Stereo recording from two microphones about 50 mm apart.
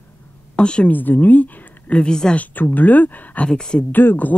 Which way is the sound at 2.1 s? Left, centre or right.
Centre.